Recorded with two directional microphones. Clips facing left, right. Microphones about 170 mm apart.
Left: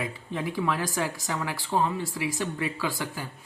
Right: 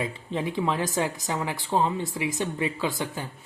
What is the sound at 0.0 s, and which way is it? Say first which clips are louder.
Speech: right 2 dB; 20° right (ahead or behind).